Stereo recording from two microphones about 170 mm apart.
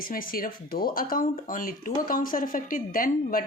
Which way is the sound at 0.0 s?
55° left (ahead or behind).